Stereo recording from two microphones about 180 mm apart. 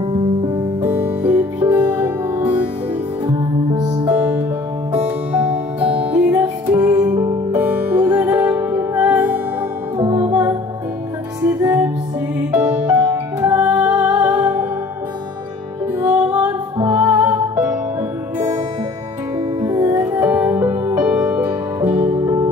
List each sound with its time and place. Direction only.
0.8 s music: 10° right (ahead or behind)
3.3 s music: 20° right (ahead or behind)
4.1 s music: 10° right (ahead or behind)
6.8 s music: 20° right (ahead or behind)
7.5 s music: 10° right (ahead or behind)
9.9 s music: 20° right (ahead or behind)
16.1 s music: 10° right (ahead or behind)
19.6 s music: 20° right (ahead or behind)
21.0 s music: 5° right (ahead or behind)